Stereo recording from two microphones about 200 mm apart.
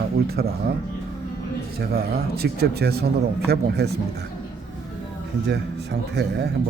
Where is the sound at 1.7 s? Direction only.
50° right (ahead or behind).